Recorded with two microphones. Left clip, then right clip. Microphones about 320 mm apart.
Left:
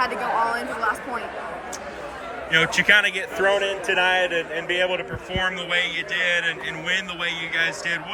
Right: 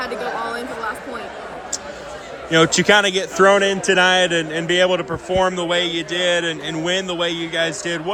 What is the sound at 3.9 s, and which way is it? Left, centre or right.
Speech, right.